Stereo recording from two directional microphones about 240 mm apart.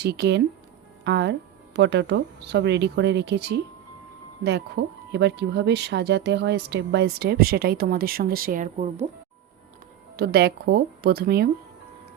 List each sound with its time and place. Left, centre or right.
0.0 s speech: right
10.2 s speech: right